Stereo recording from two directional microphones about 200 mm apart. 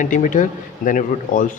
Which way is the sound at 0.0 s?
40° left (ahead or behind).